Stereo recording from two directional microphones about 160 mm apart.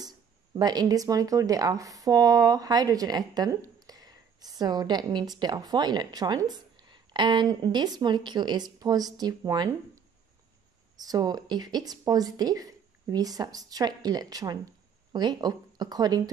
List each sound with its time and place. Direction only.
0.6 s speech: 25° right (ahead or behind)